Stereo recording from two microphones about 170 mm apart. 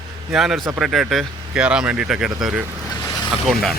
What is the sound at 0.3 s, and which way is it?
Speech, centre (ahead or behind).